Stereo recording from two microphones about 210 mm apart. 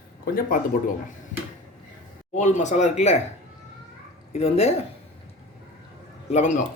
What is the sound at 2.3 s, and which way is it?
Speech, 35° left (ahead or behind).